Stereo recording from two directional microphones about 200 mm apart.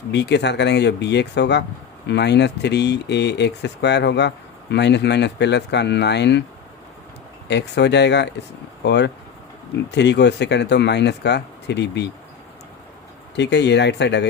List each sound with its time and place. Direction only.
0.1 s speech: 60° left (ahead or behind)
7.4 s speech: 60° left (ahead or behind)
13.3 s speech: 60° left (ahead or behind)